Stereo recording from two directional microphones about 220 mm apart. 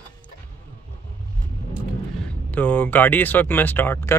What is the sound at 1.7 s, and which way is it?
Speech, 5° left (ahead or behind).